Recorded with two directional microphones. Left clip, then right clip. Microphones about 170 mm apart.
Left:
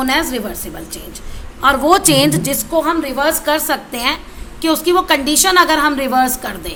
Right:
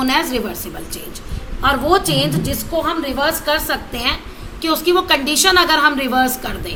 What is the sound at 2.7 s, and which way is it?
A woman's voice, 40° left (ahead or behind).